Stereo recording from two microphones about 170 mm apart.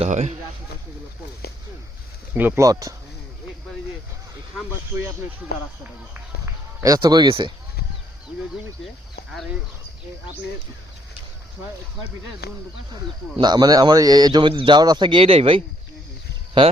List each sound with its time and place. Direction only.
0.0 s speech: 40° right (ahead or behind)
2.3 s a man's voice: 10° right (ahead or behind)
6.1 s run: 20° right (ahead or behind)
12.4 s speech: 70° left (ahead or behind)
13.4 s a man's voice: 25° right (ahead or behind)